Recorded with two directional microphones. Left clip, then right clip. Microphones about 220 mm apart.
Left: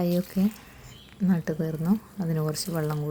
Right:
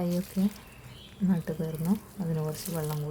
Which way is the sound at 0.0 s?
10° left (ahead or behind).